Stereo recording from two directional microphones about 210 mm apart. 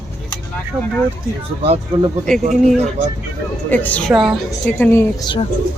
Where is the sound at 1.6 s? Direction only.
25° right (ahead or behind).